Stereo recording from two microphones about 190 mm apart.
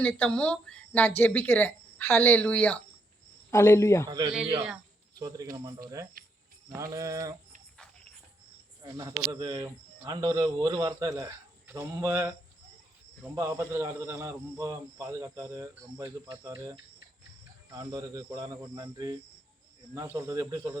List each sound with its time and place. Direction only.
0.0 s speech: 5° left (ahead or behind)
5.2 s a man's voice: 20° right (ahead or behind)
8.8 s a man's voice: 20° right (ahead or behind)
13.3 s a man's voice: 15° right (ahead or behind)